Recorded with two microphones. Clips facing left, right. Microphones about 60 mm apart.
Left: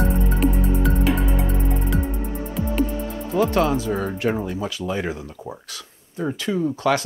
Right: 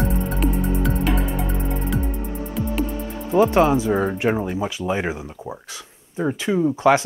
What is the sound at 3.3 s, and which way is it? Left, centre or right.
Speech, right.